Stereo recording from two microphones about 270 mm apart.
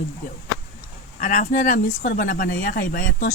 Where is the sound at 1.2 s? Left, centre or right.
Left.